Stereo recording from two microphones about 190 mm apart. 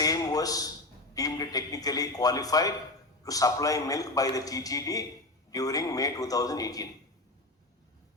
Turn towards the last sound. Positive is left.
turn(degrees=20)  # may be behind; listen again after turning